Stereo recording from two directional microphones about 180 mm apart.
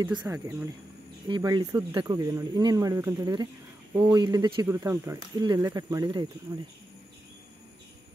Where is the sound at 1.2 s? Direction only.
25° right (ahead or behind).